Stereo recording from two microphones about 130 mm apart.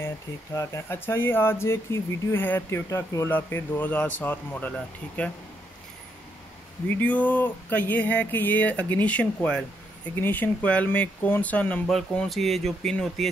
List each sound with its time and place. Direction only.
0.6 s speech: 20° left (ahead or behind)
7.0 s speech: 10° left (ahead or behind)